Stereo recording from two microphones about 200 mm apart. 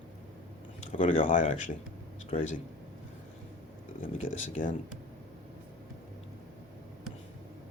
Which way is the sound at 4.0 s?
40° left (ahead or behind).